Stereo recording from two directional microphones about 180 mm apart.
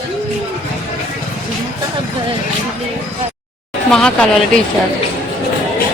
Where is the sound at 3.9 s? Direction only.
5° left (ahead or behind).